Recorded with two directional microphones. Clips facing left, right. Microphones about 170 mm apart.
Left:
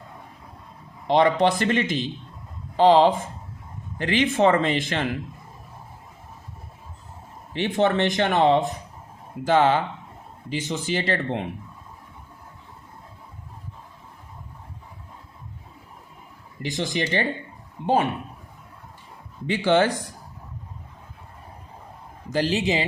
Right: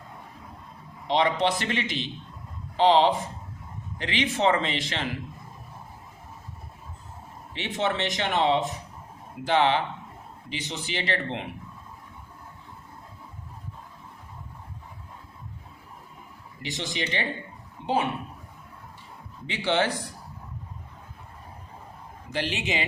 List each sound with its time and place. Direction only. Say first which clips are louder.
1.0 s speech: left 5 dB; 50° left (ahead or behind)
7.5 s speech: left 7 dB; 50° left (ahead or behind)
16.6 s speech: left 6 dB; 50° left (ahead or behind)
19.5 s speech: left 6 dB; 45° left (ahead or behind)
22.3 s speech: left 7 dB; 40° left (ahead or behind)